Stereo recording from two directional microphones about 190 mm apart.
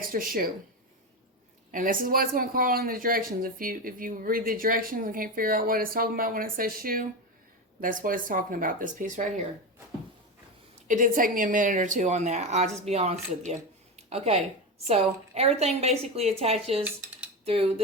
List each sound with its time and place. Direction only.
0.0 s speech: 50° right (ahead or behind)
1.7 s speech: 45° right (ahead or behind)
10.8 s speech: 45° right (ahead or behind)